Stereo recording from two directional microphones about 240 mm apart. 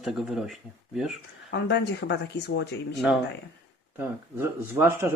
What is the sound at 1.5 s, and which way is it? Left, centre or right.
Speech, left.